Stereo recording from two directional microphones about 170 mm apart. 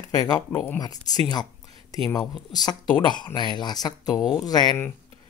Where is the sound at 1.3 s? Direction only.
25° left (ahead or behind).